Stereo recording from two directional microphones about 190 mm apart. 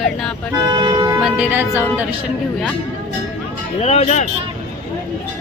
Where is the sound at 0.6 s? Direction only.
25° right (ahead or behind).